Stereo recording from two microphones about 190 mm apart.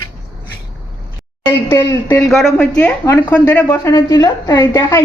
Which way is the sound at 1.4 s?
15° left (ahead or behind).